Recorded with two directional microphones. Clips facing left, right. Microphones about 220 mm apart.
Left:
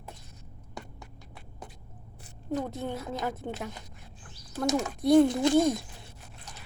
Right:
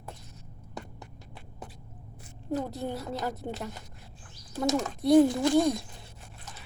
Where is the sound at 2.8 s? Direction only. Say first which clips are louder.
Even; centre (ahead or behind).